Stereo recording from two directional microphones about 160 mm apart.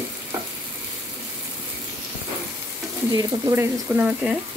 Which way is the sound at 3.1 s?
20° right (ahead or behind).